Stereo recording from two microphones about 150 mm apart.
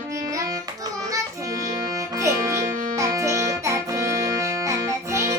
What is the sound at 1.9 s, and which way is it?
Music, 20° right (ahead or behind).